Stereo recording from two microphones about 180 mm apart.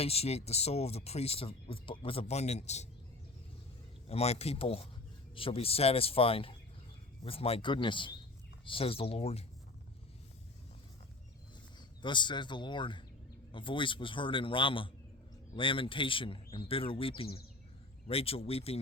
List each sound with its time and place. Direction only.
0.0 s speech: 35° left (ahead or behind)
4.1 s speech: 35° left (ahead or behind)
12.0 s speech: 25° left (ahead or behind)